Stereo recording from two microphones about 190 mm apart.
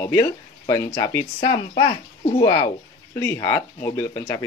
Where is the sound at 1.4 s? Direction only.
30° left (ahead or behind).